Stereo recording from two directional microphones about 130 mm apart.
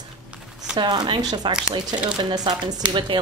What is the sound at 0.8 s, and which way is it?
Speech, 35° right (ahead or behind).